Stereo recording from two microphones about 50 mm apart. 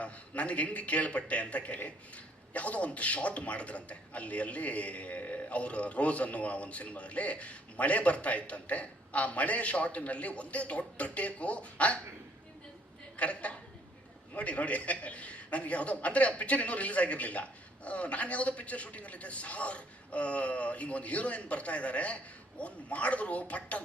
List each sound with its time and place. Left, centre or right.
0.0 s speech: left
13.1 s speech: left